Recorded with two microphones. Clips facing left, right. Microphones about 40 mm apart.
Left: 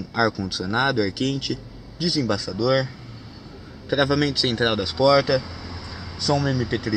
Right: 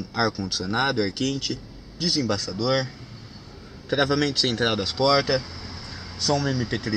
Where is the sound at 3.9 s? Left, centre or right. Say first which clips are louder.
Left 2 dB; centre.